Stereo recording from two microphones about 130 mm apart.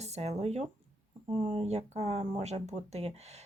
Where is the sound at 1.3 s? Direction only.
45° right (ahead or behind).